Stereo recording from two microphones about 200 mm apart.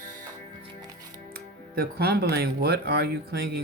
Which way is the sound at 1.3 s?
50° right (ahead or behind).